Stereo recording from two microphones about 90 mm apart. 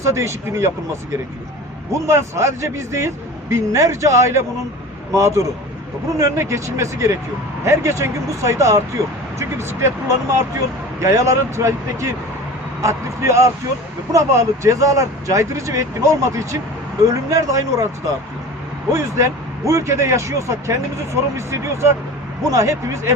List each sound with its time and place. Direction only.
0.0 s speech: 30° right (ahead or behind)
1.9 s speech: 30° right (ahead or behind)
11.0 s speech: 35° right (ahead or behind)
18.9 s speech: 35° right (ahead or behind)